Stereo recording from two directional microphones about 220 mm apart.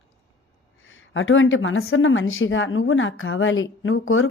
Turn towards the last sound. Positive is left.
turn(degrees=65)  # may be behind; listen again after turning